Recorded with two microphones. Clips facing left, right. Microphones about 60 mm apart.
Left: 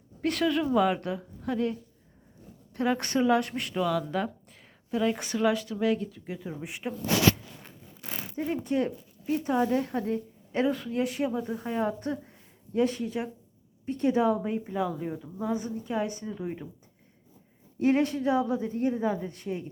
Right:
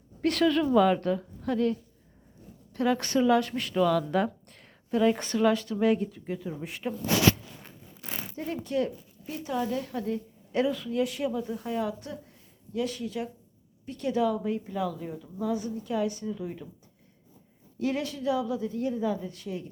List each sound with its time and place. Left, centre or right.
0.2 s a woman's voice: centre; by 3.8 s left
3.8 s speech: centre
5.7 s speech: centre
6.4 s a woman's voice: centre
8.4 s a woman's voice: centre
9.2 s a woman's voice: left
17.7 s speech: left